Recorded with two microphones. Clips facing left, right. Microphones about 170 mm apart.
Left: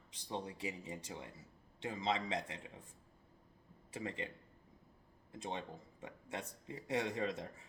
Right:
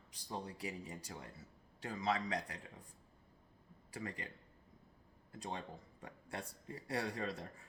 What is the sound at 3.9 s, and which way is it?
Speech, 25° left (ahead or behind).